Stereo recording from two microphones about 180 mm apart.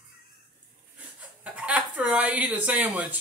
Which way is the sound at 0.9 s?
10° right (ahead or behind).